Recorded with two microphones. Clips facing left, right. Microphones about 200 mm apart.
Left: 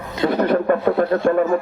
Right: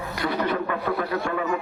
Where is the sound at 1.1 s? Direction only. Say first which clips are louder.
Left 9 dB; 50° left (ahead or behind).